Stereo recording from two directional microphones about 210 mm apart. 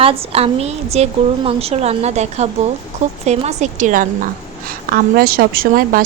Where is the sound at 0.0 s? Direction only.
25° right (ahead or behind).